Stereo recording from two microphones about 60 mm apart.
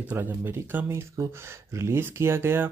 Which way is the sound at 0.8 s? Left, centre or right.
Right.